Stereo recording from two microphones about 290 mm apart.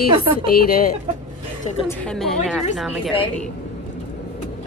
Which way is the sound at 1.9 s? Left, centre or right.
Centre.